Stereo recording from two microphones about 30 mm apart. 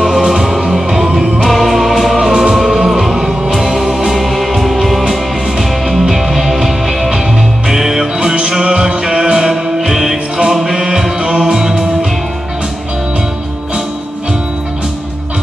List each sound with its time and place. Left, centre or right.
0.2 s music: right
1.4 s music: centre
2.1 s music: right
2.6 s music: centre
4.3 s music: centre
11.1 s music: right